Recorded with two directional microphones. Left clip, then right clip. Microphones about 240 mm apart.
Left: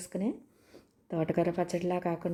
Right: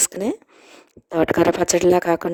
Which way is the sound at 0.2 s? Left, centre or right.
Right.